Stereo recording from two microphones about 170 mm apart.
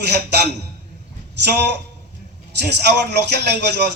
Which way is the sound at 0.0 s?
70° right (ahead or behind).